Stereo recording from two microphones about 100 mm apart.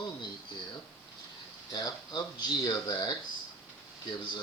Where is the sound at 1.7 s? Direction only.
45° left (ahead or behind).